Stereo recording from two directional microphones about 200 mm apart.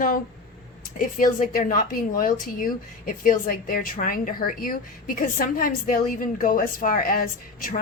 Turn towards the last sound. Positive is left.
turn(degrees=45)  # may be behind; listen again after turning